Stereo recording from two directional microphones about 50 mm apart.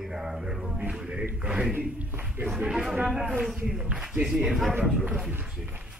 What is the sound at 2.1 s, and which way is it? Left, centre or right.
Speech, right.